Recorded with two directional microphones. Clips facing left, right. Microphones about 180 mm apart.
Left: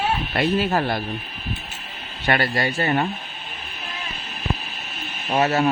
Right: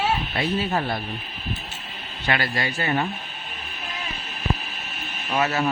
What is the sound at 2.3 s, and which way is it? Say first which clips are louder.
Speech: left 4 dB; 35° left (ahead or behind).